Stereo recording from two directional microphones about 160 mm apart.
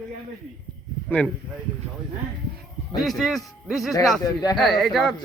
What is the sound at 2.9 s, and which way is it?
Speech, centre (ahead or behind).